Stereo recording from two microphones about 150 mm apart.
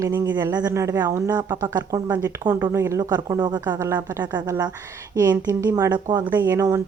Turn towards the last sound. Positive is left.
turn(degrees=-20)  # may be behind; listen again after turning